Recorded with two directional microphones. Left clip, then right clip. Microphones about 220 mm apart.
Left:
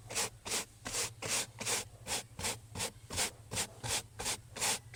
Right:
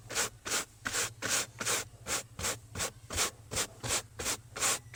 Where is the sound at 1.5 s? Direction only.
Centre (ahead or behind).